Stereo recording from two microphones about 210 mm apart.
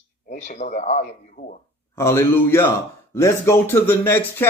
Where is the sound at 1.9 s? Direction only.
10° left (ahead or behind).